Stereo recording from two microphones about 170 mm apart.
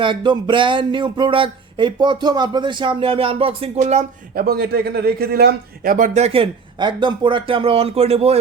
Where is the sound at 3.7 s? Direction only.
45° right (ahead or behind).